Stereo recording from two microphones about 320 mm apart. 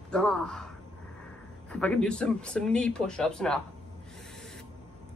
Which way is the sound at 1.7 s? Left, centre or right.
Centre.